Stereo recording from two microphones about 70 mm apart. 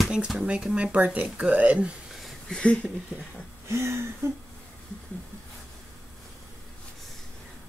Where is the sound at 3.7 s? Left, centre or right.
Right.